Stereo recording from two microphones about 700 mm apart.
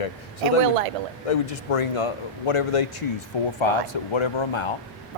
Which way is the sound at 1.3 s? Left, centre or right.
Left.